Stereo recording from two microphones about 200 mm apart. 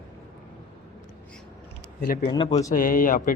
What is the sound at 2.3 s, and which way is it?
Speech, 30° left (ahead or behind).